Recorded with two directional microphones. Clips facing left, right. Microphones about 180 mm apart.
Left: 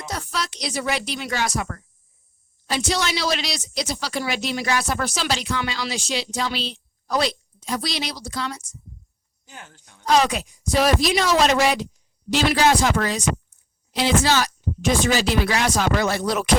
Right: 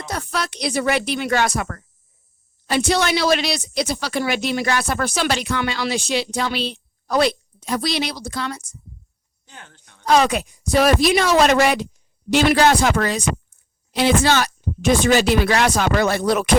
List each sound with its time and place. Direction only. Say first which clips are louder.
0.0 s a woman's voice: right 3 dB; 60° right (ahead or behind)
9.5 s speech: left 1 dB; 10° left (ahead or behind)
10.1 s a woman's voice: right 3 dB; 60° right (ahead or behind)